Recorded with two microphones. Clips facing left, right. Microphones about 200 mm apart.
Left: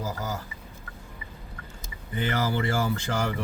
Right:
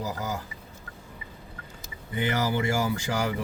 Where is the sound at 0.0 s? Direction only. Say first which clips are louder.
Right 1 dB; 20° right (ahead or behind).